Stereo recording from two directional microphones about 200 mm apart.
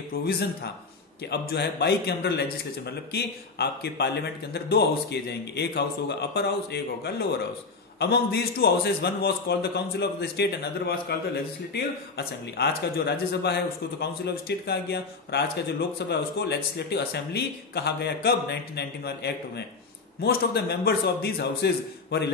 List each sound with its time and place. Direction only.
1.3 s a man's voice: 55° left (ahead or behind)